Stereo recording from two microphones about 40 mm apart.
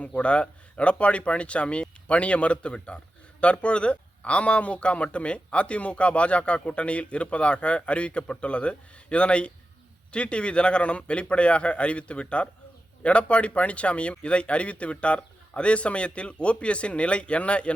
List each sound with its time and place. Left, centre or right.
0.0 s speech: left